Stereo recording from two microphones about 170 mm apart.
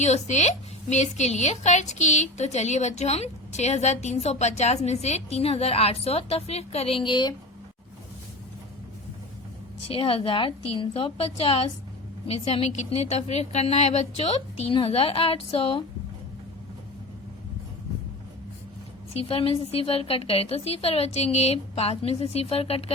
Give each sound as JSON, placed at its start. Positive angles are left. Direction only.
{"t": 0.0, "sound": "a woman's voice", "side_deg": 40}
{"t": 9.9, "sound": "a woman's voice", "side_deg": 35}
{"t": 19.1, "sound": "a woman's voice", "side_deg": 35}